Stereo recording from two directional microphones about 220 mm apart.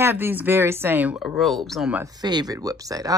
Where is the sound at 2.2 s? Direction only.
20° right (ahead or behind).